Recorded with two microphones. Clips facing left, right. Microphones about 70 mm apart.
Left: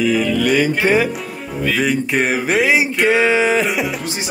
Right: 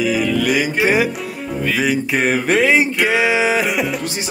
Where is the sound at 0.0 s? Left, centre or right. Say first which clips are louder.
Left 1 dB; centre.